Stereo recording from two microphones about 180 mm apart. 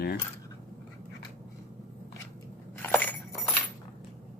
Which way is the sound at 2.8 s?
10° left (ahead or behind).